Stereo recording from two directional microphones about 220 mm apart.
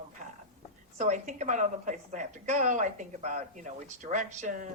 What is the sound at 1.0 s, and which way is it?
A woman's voice, 35° right (ahead or behind).